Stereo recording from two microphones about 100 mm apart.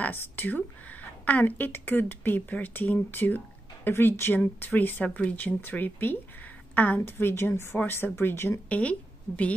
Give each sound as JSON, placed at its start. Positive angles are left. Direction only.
{"t": 0.0, "sound": "speech", "side_deg": 20}